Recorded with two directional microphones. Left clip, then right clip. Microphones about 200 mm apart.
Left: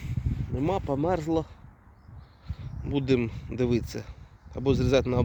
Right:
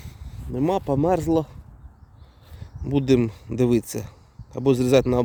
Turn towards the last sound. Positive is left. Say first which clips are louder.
# right 6 dB
turn(degrees=-35)  # may be behind; listen again after turning